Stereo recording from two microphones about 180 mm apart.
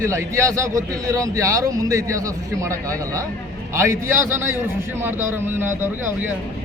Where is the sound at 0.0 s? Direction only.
15° right (ahead or behind).